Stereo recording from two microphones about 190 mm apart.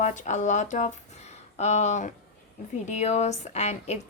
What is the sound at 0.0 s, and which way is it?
Speech, 40° left (ahead or behind).